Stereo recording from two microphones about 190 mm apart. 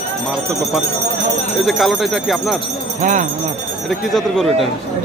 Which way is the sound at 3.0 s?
40° right (ahead or behind).